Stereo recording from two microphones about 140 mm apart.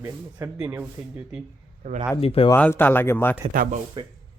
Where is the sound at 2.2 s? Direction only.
45° left (ahead or behind).